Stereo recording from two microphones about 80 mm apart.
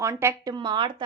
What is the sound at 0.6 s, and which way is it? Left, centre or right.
Speech, right.